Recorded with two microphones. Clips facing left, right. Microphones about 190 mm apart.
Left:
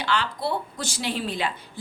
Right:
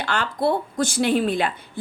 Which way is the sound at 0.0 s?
50° right (ahead or behind).